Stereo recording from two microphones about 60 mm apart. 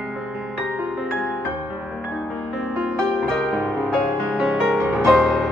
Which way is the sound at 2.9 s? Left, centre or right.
Centre.